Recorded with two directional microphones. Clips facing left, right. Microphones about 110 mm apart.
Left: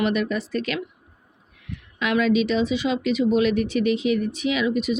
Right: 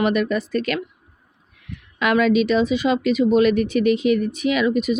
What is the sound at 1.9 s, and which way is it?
Speech, 55° right (ahead or behind).